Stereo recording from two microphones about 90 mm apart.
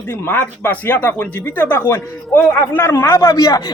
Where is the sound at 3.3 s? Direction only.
40° left (ahead or behind).